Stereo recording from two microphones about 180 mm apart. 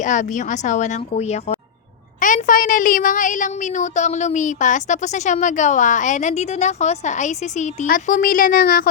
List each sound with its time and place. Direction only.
0.0 s a woman's voice: 45° left (ahead or behind)
2.2 s a woman's voice: 50° left (ahead or behind)